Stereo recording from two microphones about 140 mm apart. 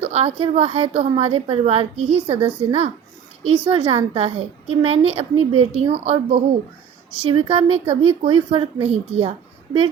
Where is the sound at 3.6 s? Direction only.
40° right (ahead or behind).